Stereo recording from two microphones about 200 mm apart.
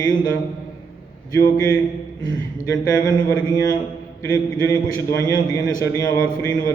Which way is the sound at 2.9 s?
15° left (ahead or behind).